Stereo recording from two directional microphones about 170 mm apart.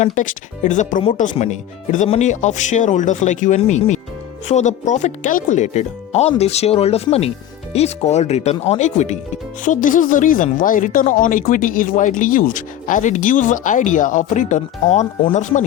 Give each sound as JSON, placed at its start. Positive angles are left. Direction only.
{"t": 0.0, "sound": "speech", "side_deg": 50}